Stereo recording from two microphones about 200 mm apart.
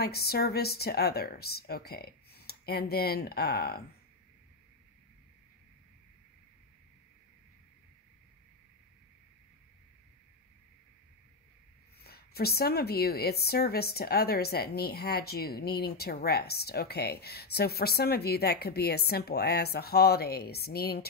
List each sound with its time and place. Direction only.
0.0 s a woman's voice: 50° left (ahead or behind)
12.0 s a woman's voice: 50° left (ahead or behind)